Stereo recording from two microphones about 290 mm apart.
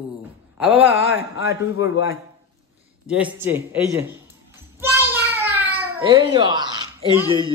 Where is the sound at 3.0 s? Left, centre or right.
Centre.